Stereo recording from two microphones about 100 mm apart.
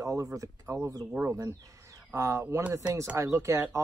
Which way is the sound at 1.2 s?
5° right (ahead or behind).